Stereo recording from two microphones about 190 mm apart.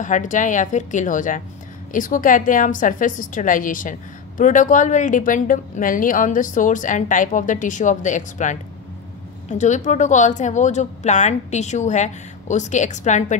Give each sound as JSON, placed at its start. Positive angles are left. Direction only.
{"t": 0.0, "sound": "speech", "side_deg": 40}